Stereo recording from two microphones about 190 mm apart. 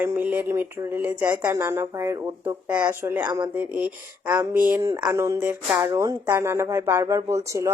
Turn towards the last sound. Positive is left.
turn(degrees=-15)  # may be behind; listen again after turning